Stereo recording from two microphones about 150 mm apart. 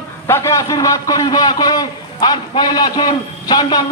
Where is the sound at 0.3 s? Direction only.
20° left (ahead or behind).